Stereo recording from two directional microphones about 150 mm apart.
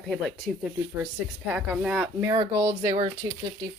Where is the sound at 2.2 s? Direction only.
25° right (ahead or behind).